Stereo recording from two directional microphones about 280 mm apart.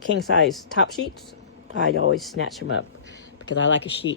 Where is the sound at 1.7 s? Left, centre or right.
Left.